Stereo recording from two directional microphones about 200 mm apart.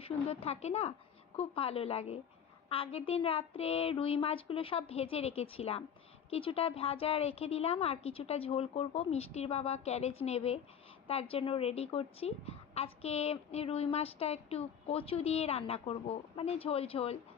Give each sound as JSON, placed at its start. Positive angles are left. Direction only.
{"t": 0.0, "sound": "a woman's voice", "side_deg": 30}
{"t": 2.7, "sound": "a sound", "side_deg": 30}
{"t": 6.3, "sound": "a woman's voice", "side_deg": 30}